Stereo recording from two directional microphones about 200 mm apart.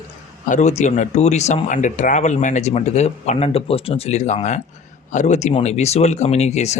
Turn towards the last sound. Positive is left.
turn(degrees=35)  # may be behind; listen again after turning